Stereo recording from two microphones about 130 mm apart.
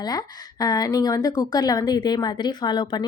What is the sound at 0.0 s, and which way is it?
Speech, 30° left (ahead or behind).